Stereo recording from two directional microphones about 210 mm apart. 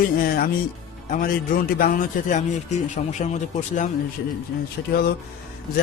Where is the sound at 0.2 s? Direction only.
45° left (ahead or behind).